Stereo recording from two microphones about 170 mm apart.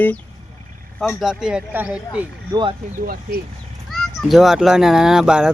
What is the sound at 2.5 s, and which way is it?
Speech, 25° right (ahead or behind).